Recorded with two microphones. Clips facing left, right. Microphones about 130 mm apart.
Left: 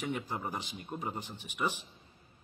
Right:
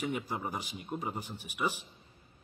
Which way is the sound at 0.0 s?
10° right (ahead or behind).